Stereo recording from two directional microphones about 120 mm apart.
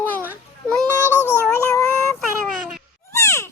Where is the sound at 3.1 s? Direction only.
25° left (ahead or behind).